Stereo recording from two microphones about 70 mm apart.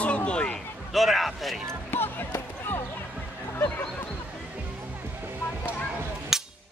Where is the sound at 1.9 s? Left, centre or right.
Left.